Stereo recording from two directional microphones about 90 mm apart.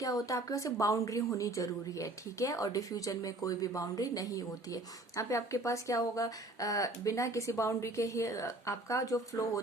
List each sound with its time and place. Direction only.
0.0 s a woman's voice: 40° left (ahead or behind)